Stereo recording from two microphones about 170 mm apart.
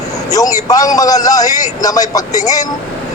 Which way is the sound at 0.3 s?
20° left (ahead or behind).